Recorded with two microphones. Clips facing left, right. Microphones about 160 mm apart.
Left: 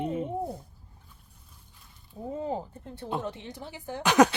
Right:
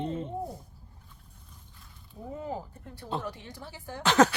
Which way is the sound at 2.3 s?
25° left (ahead or behind).